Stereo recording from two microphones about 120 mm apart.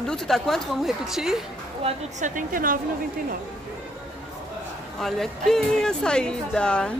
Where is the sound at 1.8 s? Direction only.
90° right.